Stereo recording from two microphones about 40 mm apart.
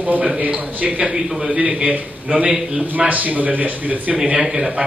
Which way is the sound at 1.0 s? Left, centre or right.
Centre.